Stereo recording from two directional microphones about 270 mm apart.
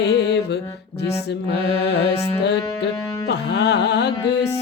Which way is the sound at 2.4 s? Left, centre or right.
Left.